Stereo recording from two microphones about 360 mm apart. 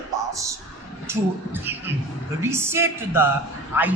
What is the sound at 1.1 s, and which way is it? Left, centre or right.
A man's voice, centre.